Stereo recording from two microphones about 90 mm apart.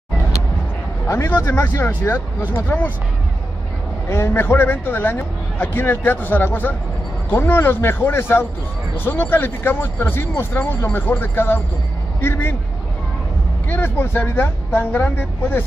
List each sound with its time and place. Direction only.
1.0 s speech: 30° left (ahead or behind)
4.1 s speech: 25° left (ahead or behind)
13.7 s speech: 25° left (ahead or behind)